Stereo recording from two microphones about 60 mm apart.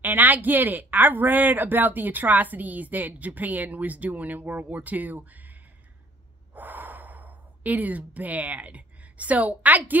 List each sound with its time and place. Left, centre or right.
0.0 s speech: right
6.5 s speech: right